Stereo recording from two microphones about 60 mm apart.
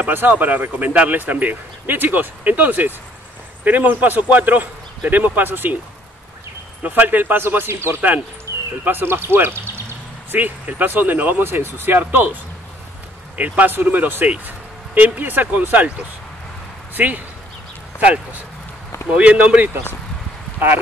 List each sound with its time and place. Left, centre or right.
0.0 s speech: right
6.8 s speech: right
10.3 s speech: right
13.4 s speech: right
16.9 s speech: right